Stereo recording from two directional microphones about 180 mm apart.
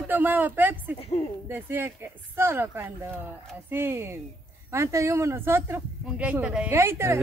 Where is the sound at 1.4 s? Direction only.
10° right (ahead or behind).